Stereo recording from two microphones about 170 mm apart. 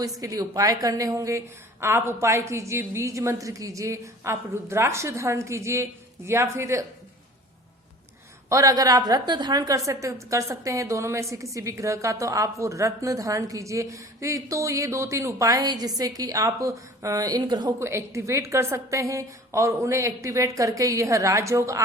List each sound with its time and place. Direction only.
0.0 s a woman's voice: 20° right (ahead or behind)
8.4 s a woman's voice: 20° right (ahead or behind)